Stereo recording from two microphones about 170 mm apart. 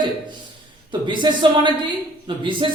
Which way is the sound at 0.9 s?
30° right (ahead or behind).